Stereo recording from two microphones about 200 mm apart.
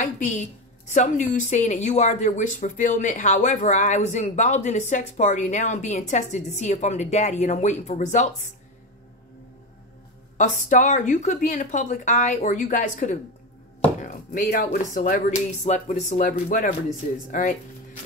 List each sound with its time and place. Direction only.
0.0 s a woman's voice: 40° left (ahead or behind)
10.3 s a woman's voice: 40° left (ahead or behind)